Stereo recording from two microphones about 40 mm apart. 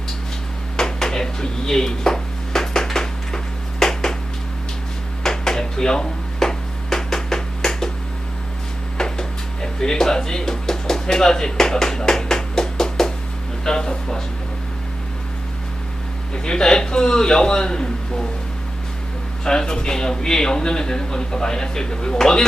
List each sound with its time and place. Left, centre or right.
0.8 s a sound: centre
5.2 s a sound: centre
9.0 s music: centre
13.7 s speech: centre
16.3 s a man's voice: left
19.5 s speech: centre